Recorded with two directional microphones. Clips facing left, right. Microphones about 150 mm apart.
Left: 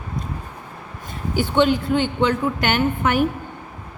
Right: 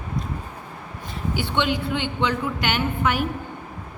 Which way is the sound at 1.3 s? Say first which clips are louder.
Left 6 dB; 45° left (ahead or behind).